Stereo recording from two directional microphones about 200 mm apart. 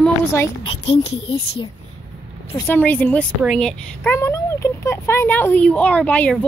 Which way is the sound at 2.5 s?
10° left (ahead or behind).